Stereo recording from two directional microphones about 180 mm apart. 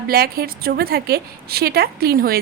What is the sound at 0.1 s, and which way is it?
A woman's voice, 55° right (ahead or behind).